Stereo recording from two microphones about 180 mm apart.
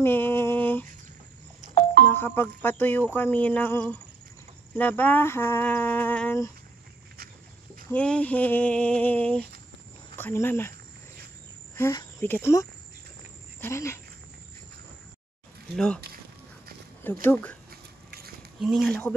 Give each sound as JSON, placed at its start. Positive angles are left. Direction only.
{"t": 0.0, "sound": "a sound", "side_deg": 10}
{"t": 2.0, "sound": "speech", "side_deg": 10}
{"t": 7.9, "sound": "speech", "side_deg": 5}
{"t": 11.7, "sound": "speech", "side_deg": 15}
{"t": 15.7, "sound": "speech", "side_deg": 5}
{"t": 17.3, "sound": "speech", "side_deg": 5}
{"t": 17.6, "sound": "a sound", "side_deg": -60}
{"t": 18.6, "sound": "speech", "side_deg": 0}